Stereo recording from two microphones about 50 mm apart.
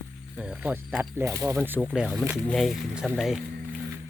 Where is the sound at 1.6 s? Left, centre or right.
Right.